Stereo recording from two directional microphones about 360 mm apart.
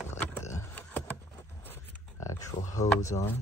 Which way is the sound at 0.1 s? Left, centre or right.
Centre.